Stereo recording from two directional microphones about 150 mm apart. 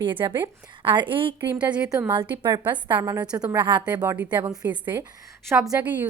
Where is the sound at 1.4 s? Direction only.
10° right (ahead or behind).